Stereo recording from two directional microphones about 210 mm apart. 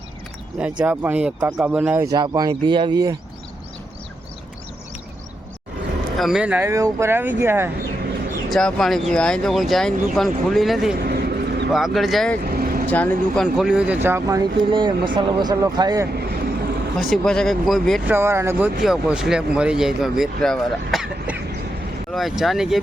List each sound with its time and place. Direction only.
0.8 s speech: 5° right (ahead or behind)
6.1 s speech: centre (ahead or behind)
8.4 s speech: centre (ahead or behind)
11.0 s vehicle: 50° right (ahead or behind)
11.7 s speech: centre (ahead or behind)
12.4 s vehicle: 45° right (ahead or behind)
12.9 s speech: 5° left (ahead or behind); by 16.0 s 15° right (ahead or behind)
16.1 s vehicle: 50° right (ahead or behind)
17.0 s speech: centre (ahead or behind)
18.1 s speech: 10° right (ahead or behind)